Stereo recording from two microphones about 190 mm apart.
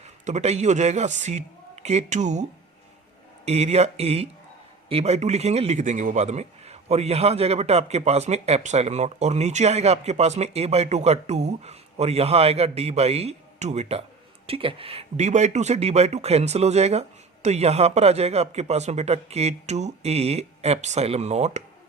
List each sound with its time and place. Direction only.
0.3 s a man's voice: 35° right (ahead or behind)